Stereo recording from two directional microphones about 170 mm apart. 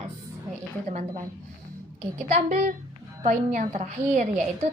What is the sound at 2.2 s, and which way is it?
A woman's voice, 50° right (ahead or behind).